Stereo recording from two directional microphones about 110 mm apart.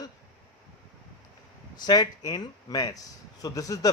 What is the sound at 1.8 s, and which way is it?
Speech, 40° left (ahead or behind).